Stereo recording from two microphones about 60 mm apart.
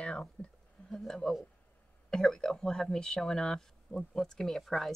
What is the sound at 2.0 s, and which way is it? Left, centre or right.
Speech, centre.